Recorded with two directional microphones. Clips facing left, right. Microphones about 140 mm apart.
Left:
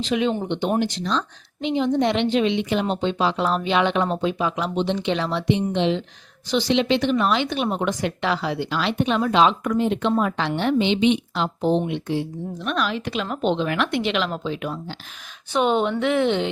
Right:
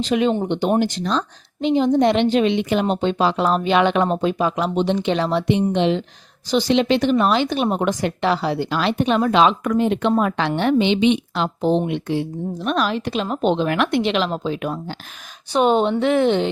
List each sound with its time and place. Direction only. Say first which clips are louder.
0.0 s a woman's voice: right 4 dB; 45° right (ahead or behind)
9.3 s a woman's voice: right 2 dB; 70° right (ahead or behind)
12.6 s a woman's voice: right 4 dB; 40° right (ahead or behind)
13.9 s a woman's voice: right 4 dB; 35° right (ahead or behind)
15.5 s a woman's voice: right 4 dB; 35° right (ahead or behind)